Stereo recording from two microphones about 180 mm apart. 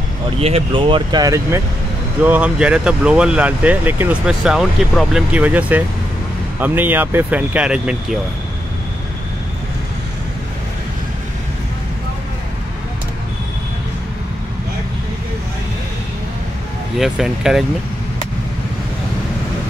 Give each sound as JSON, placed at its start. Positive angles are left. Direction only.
{"t": 0.4, "sound": "speech", "side_deg": -30}
{"t": 2.2, "sound": "speech", "side_deg": -10}
{"t": 17.0, "sound": "speech", "side_deg": -5}